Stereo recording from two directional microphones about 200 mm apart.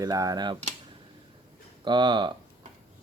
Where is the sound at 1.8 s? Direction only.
25° right (ahead or behind).